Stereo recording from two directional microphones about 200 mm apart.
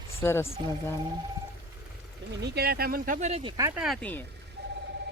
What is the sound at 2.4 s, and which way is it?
Speech, 55° right (ahead or behind).